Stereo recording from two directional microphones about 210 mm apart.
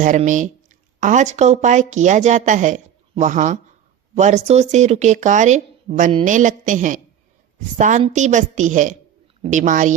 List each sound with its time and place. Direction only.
0.0 s speech: 40° right (ahead or behind)